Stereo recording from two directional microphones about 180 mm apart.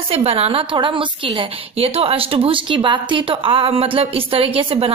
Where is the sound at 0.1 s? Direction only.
35° right (ahead or behind).